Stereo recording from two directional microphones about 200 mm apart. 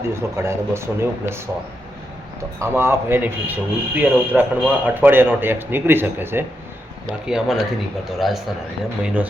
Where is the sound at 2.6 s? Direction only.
10° right (ahead or behind).